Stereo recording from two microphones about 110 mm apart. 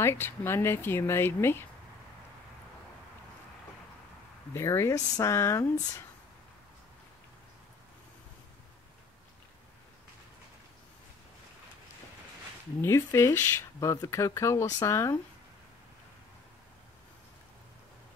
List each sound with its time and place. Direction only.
0.0 s speech: 20° left (ahead or behind)
4.6 s speech: 25° left (ahead or behind)
12.8 s speech: 25° left (ahead or behind)